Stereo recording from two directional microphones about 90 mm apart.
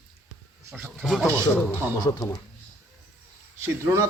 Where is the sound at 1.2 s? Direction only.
35° right (ahead or behind).